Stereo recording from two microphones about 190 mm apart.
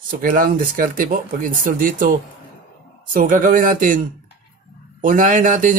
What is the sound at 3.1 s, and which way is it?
Speech, 45° right (ahead or behind).